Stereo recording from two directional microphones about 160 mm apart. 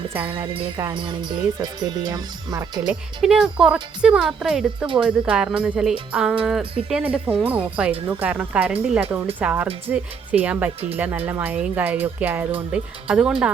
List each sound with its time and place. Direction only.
0.1 s speech: 10° right (ahead or behind)
0.3 s music: 30° right (ahead or behind)
0.8 s speech: 25° right (ahead or behind)
2.8 s speech: 5° right (ahead or behind)